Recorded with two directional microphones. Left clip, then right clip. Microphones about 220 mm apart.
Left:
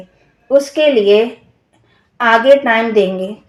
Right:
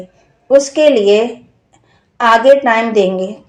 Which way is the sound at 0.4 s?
20° right (ahead or behind).